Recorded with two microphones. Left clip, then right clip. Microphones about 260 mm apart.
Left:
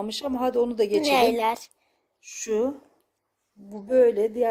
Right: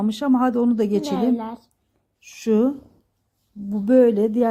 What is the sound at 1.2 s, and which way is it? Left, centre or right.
Speech, left.